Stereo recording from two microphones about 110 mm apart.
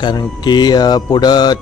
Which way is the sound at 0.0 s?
40° left (ahead or behind).